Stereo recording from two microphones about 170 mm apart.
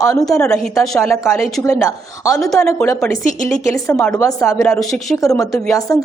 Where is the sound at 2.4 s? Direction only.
5° left (ahead or behind).